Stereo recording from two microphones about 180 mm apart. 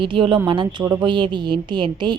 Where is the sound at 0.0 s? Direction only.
30° right (ahead or behind).